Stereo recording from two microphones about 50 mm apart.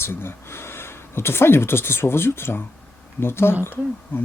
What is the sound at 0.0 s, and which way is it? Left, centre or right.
Speech, left.